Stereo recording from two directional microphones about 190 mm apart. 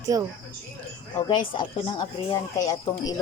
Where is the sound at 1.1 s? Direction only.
20° left (ahead or behind).